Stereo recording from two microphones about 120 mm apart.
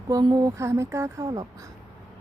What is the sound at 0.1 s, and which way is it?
Speech, 35° right (ahead or behind).